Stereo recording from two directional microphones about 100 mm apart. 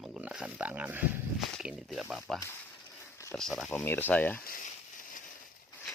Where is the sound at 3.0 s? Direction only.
25° left (ahead or behind).